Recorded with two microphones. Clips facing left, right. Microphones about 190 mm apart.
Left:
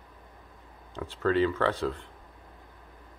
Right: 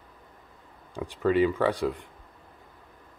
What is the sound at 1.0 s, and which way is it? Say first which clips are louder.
Speech: right 2 dB; 15° right (ahead or behind).